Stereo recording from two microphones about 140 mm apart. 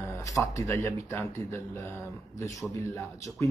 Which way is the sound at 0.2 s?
20° left (ahead or behind).